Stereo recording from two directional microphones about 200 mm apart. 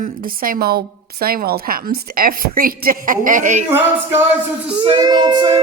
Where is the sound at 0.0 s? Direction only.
45° right (ahead or behind).